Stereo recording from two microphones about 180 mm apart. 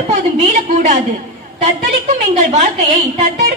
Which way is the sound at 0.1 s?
40° right (ahead or behind).